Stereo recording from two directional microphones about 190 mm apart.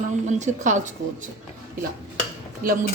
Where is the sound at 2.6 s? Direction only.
50° right (ahead or behind).